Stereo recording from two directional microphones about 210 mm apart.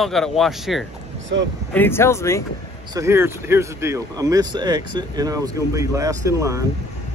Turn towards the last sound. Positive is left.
turn(degrees=-15)  # may be behind; listen again after turning